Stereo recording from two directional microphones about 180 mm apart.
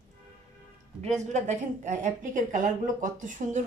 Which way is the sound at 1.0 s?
40° right (ahead or behind).